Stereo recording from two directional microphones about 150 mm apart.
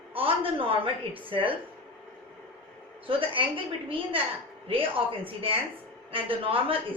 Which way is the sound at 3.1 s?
35° right (ahead or behind).